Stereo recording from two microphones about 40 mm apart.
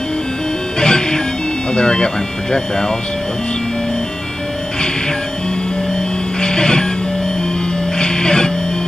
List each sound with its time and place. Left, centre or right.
0.7 s music: centre
1.7 s speech: left
6.4 s music: centre
8.0 s music: centre